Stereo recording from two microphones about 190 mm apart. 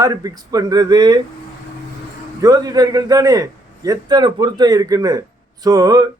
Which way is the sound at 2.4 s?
20° right (ahead or behind).